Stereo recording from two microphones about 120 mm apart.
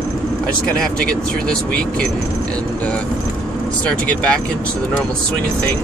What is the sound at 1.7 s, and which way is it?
Speech, 5° left (ahead or behind).